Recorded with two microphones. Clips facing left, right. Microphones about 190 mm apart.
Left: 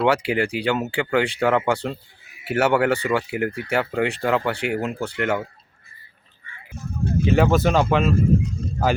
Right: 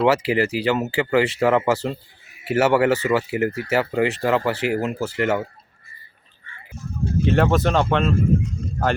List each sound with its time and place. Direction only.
0.0 s speech: centre (ahead or behind)
6.7 s speech: 55° left (ahead or behind)
7.3 s speech: centre (ahead or behind)